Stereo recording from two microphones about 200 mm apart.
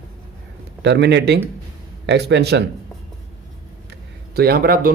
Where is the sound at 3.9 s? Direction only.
50° right (ahead or behind).